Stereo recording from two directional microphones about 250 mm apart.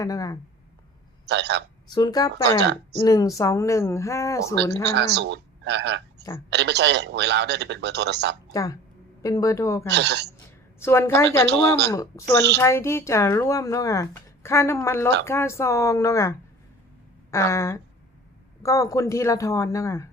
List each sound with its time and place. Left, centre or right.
0.0 s speech: centre
1.3 s a man's voice: right
1.9 s speech: centre
2.6 s a woman's voice: right
3.0 s speech: centre
4.9 s a man's voice: right
8.5 s speech: centre
9.9 s a man's voice: right
10.8 s speech: centre
17.3 s speech: centre